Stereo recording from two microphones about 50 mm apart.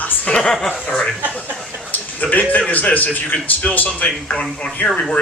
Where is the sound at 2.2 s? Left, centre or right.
Left.